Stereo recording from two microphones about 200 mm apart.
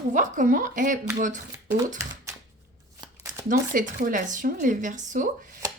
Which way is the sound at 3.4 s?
40° right (ahead or behind).